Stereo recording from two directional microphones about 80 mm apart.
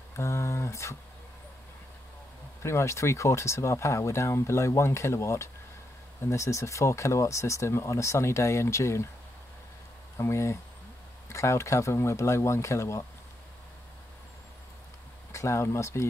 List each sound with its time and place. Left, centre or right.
0.1 s speech: left
2.6 s speech: left
10.1 s speech: left
15.3 s speech: left